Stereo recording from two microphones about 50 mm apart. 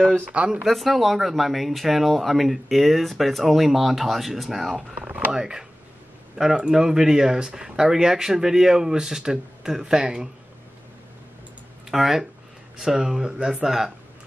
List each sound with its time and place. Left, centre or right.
0.3 s speech: right
0.7 s speech: centre
4.9 s a sound: right
5.3 s speech: centre
11.9 s speech: centre